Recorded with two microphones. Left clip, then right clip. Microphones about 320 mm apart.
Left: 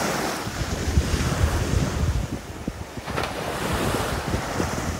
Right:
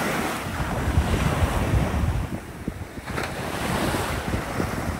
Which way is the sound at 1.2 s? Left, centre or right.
Centre.